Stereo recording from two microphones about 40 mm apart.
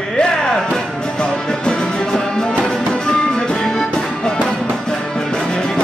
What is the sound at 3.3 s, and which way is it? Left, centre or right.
Music, centre.